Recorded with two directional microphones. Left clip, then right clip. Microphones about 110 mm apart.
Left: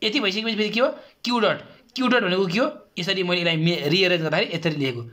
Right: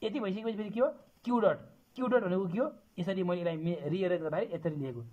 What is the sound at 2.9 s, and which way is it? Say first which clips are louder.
Speech: left 11 dB; 50° right (ahead or behind).